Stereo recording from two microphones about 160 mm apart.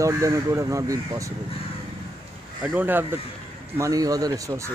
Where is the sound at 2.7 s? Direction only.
10° right (ahead or behind).